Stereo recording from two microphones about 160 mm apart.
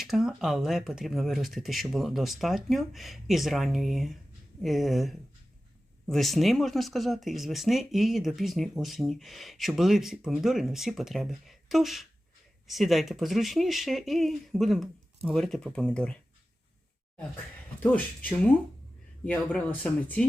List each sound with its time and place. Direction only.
0.0 s speech: centre (ahead or behind)
17.9 s speech: 10° left (ahead or behind)